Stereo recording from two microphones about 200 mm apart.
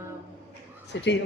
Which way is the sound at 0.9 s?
60° left (ahead or behind).